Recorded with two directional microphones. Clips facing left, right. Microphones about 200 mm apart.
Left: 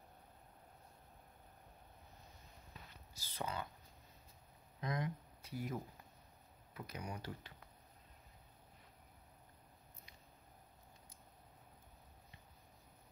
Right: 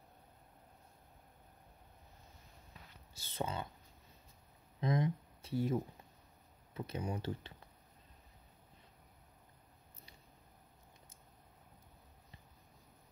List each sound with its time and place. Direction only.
3.1 s speech: 25° right (ahead or behind)
4.7 s a sound: 25° right (ahead or behind)
6.7 s speech: 25° right (ahead or behind)